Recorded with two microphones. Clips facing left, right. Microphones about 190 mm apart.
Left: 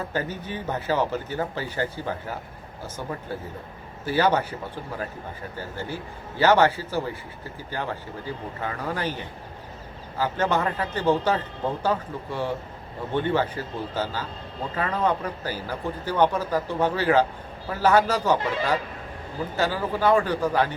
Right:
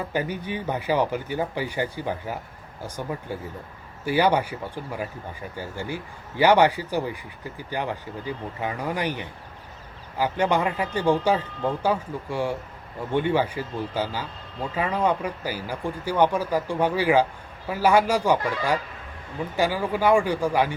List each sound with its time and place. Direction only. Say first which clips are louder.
0.0 s a man's voice: right 2 dB; 15° right (ahead or behind)
18.3 s speech: even; 25° left (ahead or behind)
19.5 s a man's voice: right 2 dB; 10° right (ahead or behind)